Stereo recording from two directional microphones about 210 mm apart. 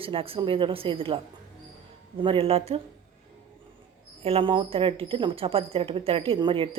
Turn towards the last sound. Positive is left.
turn(degrees=-25)  # may be behind; listen again after turning